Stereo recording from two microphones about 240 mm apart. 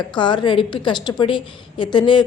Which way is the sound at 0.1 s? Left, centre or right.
Centre.